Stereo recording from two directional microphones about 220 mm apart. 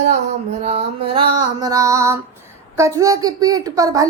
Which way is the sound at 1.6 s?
15° right (ahead or behind).